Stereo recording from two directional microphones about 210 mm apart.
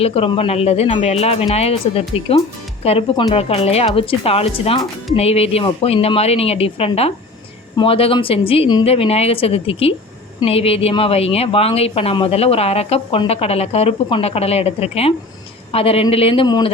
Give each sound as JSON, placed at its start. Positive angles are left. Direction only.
{"t": 0.0, "sound": "speech", "side_deg": 30}